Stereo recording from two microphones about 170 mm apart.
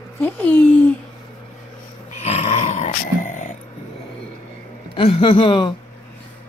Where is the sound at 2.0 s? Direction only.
40° left (ahead or behind).